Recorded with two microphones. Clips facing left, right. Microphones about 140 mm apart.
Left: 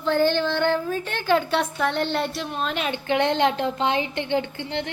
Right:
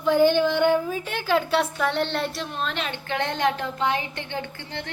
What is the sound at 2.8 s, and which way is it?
A woman's voice, 15° left (ahead or behind).